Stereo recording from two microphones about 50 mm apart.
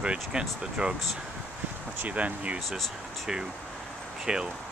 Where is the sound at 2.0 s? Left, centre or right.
Right.